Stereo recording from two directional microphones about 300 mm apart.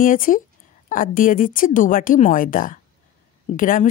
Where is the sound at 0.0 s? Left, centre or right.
Left.